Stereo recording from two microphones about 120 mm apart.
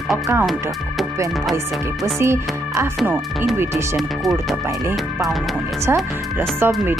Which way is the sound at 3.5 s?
20° right (ahead or behind).